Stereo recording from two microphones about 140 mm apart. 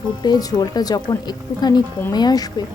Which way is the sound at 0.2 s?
30° left (ahead or behind).